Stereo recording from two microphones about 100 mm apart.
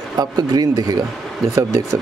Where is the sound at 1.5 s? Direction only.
30° right (ahead or behind).